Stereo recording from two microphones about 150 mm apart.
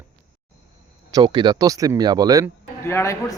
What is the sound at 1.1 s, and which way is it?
Speech, 30° right (ahead or behind).